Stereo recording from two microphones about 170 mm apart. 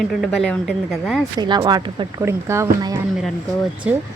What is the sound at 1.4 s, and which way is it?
Speech, 25° right (ahead or behind).